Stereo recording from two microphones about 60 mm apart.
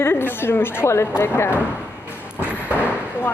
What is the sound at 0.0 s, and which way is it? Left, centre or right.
A woman's voice, left.